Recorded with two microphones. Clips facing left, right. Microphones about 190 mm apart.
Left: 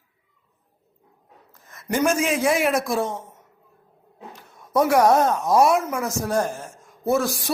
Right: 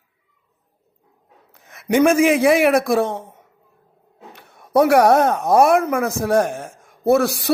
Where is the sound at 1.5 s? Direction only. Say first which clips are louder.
Right 8 dB; 70° right (ahead or behind).